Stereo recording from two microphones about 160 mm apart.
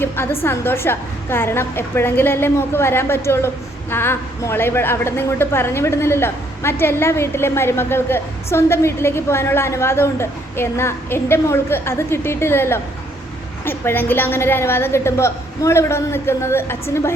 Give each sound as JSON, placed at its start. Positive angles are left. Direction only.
{"t": 0.0, "sound": "a woman's voice", "side_deg": 15}